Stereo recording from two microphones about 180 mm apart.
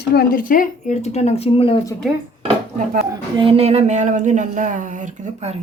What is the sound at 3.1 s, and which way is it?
Speech, 25° right (ahead or behind).